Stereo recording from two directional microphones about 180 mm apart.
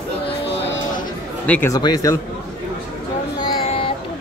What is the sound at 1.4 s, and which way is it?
Speech, 10° left (ahead or behind).